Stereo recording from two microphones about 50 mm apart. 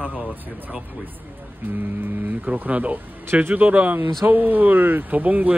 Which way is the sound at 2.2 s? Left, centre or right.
Right.